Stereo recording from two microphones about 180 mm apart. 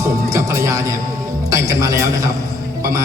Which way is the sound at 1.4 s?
15° right (ahead or behind).